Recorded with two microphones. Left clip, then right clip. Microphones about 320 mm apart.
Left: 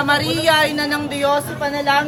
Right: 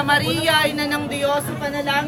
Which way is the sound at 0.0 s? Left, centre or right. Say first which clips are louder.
Left 2 dB; left.